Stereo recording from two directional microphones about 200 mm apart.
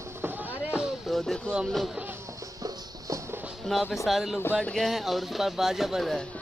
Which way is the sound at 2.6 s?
20° right (ahead or behind).